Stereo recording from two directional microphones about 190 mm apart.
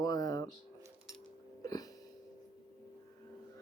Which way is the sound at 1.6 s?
20° left (ahead or behind).